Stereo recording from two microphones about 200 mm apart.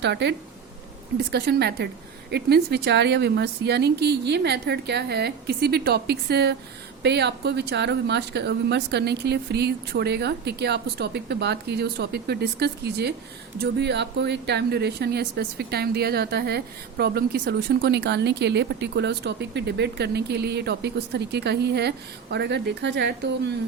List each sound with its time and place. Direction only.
0.0 s speech: 60° right (ahead or behind)